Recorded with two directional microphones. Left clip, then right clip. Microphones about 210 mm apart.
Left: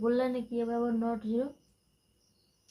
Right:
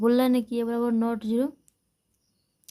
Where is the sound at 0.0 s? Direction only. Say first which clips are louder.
Right 7 dB; 50° right (ahead or behind).